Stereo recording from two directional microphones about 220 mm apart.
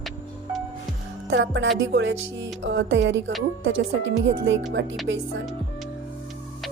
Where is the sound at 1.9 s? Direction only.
50° right (ahead or behind).